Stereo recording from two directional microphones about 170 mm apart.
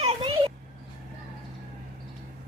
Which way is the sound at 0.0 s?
30° right (ahead or behind).